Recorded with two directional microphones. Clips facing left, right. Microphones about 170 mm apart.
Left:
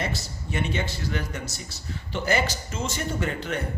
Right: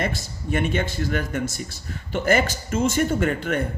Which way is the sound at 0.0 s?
50° right (ahead or behind).